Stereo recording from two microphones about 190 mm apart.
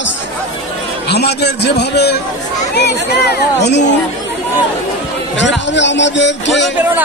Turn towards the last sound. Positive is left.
turn(degrees=70)  # may be behind; listen again after turning